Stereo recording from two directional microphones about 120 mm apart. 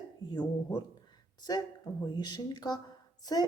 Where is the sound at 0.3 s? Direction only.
35° left (ahead or behind).